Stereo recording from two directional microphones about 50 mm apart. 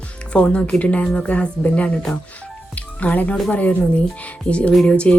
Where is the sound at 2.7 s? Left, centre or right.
Left.